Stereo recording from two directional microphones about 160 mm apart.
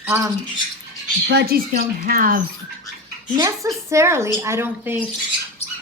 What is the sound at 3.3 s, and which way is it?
Speech, 20° right (ahead or behind).